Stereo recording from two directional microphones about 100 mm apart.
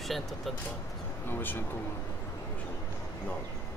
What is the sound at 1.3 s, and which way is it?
Speech, 20° left (ahead or behind).